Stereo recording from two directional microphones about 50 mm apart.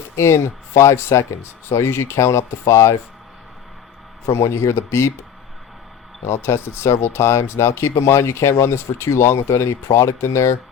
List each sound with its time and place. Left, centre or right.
1.1 s speech: left
1.7 s speech: left
4.3 s speech: left
6.2 s speech: left